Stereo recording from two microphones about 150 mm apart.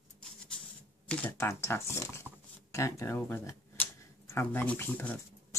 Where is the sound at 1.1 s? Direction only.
10° left (ahead or behind).